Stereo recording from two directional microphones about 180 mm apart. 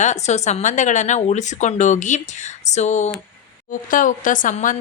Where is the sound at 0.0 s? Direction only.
40° left (ahead or behind).